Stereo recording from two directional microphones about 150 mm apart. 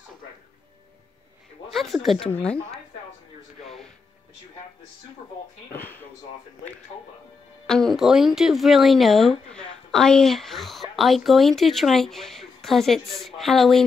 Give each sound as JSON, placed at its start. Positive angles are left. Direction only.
{"t": 1.7, "sound": "speech", "side_deg": 0}
{"t": 3.6, "sound": "music", "side_deg": 0}
{"t": 5.7, "sound": "speech", "side_deg": 10}
{"t": 7.6, "sound": "speech", "side_deg": 5}